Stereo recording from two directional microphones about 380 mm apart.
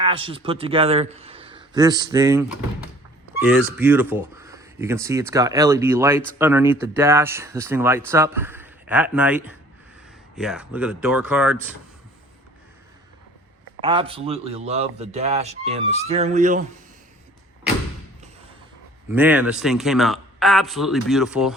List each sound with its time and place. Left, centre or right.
0.0 s a man's voice: centre
13.8 s speech: centre
19.1 s speech: centre